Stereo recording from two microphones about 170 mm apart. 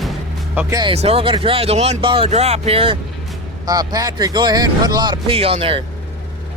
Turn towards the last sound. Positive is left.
turn(degrees=-35)  # may be behind; listen again after turning